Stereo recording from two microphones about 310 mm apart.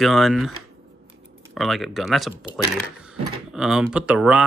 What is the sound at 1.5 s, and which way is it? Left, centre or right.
Speech, centre.